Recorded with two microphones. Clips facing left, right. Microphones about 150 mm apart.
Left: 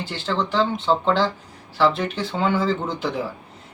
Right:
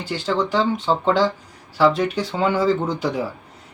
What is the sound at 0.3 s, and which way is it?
Speech, 10° right (ahead or behind).